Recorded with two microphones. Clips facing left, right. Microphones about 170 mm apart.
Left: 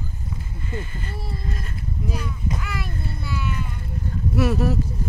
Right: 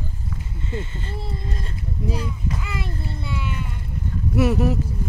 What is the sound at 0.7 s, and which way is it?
Speech, 25° right (ahead or behind).